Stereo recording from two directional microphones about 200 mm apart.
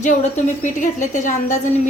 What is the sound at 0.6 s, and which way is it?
Speech, 40° left (ahead or behind).